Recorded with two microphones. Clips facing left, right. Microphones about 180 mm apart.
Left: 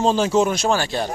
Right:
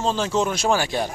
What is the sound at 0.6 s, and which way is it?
Speech, 10° right (ahead or behind).